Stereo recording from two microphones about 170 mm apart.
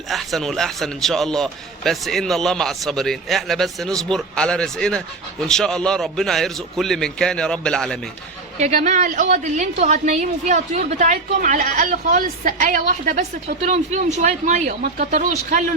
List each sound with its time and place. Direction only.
0.1 s a man's voice: centre (ahead or behind)
8.5 s a woman's voice: 40° right (ahead or behind)